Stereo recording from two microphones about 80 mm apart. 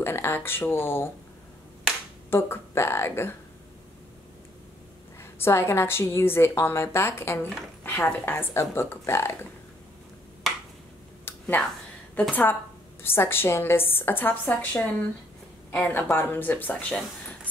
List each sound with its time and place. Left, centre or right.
0.0 s speech: left
2.3 s a woman's voice: left
5.2 s a woman's voice: left
10.4 s a sound: centre
11.3 s a sound: left
12.2 s a woman's voice: left